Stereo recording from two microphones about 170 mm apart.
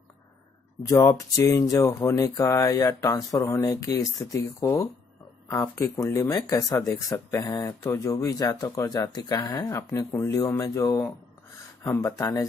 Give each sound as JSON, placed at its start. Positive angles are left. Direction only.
{"t": 0.8, "sound": "speech", "side_deg": 20}